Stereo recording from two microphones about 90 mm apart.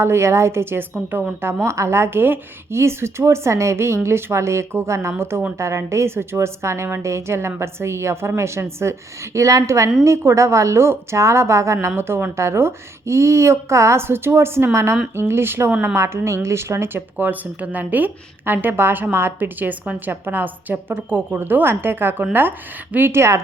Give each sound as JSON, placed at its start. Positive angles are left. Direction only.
{"t": 0.0, "sound": "a woman's voice", "side_deg": -30}